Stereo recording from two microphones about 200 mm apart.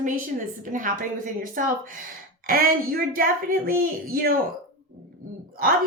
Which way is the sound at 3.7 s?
45° right (ahead or behind).